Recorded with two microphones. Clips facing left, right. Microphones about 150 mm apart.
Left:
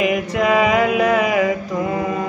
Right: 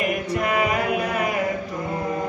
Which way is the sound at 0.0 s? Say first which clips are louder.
Left 6 dB; 90° left.